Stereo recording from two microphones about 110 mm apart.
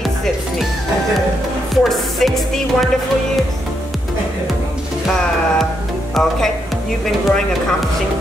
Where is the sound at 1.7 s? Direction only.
Centre (ahead or behind).